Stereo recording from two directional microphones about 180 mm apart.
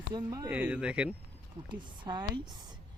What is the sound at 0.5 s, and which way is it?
Speech, 10° right (ahead or behind).